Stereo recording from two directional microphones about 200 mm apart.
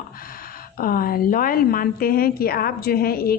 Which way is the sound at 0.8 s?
45° left (ahead or behind).